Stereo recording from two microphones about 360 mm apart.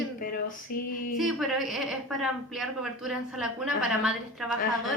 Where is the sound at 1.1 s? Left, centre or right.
Centre.